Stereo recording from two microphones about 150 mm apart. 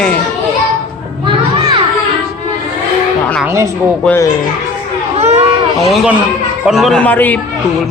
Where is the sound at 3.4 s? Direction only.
20° right (ahead or behind).